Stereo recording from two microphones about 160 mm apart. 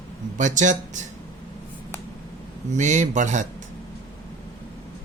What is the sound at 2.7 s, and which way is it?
Speech, 50° right (ahead or behind).